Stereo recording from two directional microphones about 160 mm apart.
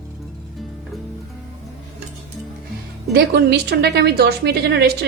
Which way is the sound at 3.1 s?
85° right.